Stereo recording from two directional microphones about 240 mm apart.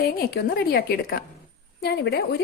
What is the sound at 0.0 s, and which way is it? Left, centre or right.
A woman's voice, left.